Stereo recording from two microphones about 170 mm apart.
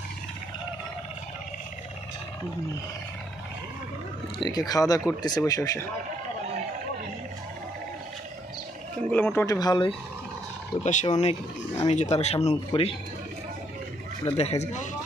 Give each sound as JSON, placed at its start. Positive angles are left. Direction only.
{"t": 4.4, "sound": "speech", "side_deg": 25}
{"t": 9.1, "sound": "speech", "side_deg": 10}
{"t": 10.8, "sound": "speech", "side_deg": 45}
{"t": 14.2, "sound": "speech", "side_deg": 40}